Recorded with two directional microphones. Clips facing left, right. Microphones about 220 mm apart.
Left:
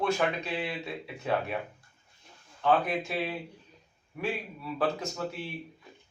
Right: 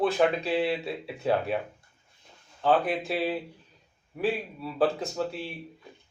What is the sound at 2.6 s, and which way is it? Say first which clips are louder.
A man's voice: right 2 dB; 30° right (ahead or behind).